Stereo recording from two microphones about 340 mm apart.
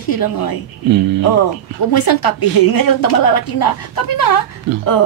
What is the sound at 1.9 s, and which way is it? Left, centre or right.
A woman's voice, left.